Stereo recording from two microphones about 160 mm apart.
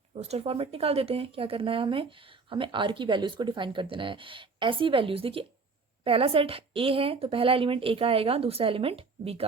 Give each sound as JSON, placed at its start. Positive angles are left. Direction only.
{"t": 0.1, "sound": "a woman's voice", "side_deg": -40}